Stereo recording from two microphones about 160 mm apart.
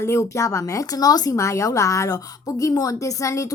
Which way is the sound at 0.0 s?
15° left (ahead or behind).